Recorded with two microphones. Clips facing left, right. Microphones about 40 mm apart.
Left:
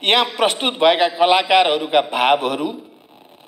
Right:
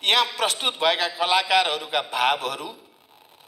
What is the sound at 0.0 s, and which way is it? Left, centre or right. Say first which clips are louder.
A man's voice: left 5 dB; left.